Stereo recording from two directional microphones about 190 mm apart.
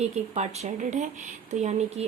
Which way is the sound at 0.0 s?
35° right (ahead or behind).